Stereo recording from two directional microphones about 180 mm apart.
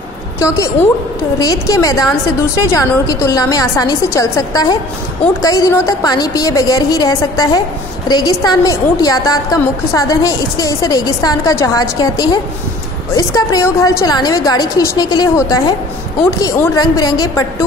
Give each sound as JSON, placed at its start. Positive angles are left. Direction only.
{"t": 1.4, "sound": "a woman's voice", "side_deg": 20}